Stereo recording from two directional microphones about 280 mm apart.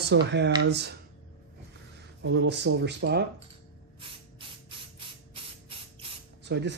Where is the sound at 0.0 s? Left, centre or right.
Right.